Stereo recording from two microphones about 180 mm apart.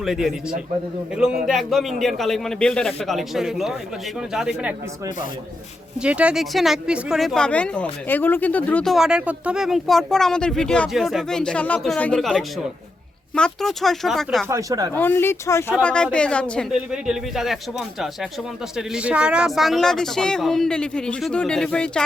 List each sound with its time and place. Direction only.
0.0 s a woman's voice: centre (ahead or behind)
6.0 s a woman's voice: 5° right (ahead or behind)
14.4 s speech: 15° right (ahead or behind)
14.9 s a woman's voice: 10° left (ahead or behind)